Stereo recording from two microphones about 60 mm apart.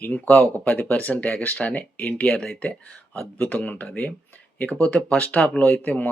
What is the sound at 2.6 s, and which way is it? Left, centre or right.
Speech, centre.